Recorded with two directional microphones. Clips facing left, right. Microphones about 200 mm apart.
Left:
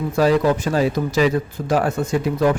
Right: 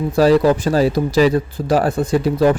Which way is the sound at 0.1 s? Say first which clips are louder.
Right 4 dB; 35° right (ahead or behind).